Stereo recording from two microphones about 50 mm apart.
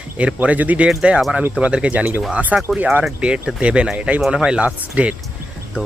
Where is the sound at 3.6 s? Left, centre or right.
Right.